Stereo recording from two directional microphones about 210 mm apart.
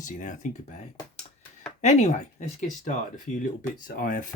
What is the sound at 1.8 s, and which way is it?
Speech, 35° left (ahead or behind).